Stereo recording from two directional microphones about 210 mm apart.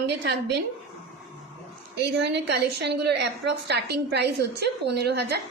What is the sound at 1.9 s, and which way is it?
A woman's voice, 55° right (ahead or behind).